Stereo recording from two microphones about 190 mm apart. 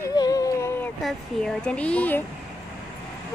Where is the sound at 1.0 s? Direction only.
Centre (ahead or behind).